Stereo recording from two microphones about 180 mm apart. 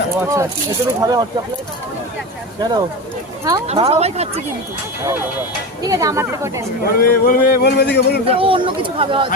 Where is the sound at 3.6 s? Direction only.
35° right (ahead or behind).